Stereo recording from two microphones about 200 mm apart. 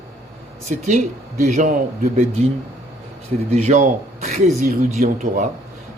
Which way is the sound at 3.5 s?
35° right (ahead or behind).